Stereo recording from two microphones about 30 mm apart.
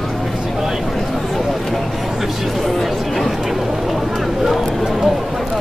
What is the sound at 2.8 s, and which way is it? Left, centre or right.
Chatter, centre.